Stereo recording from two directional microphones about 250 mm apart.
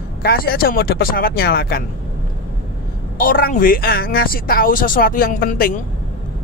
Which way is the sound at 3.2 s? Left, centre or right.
Left.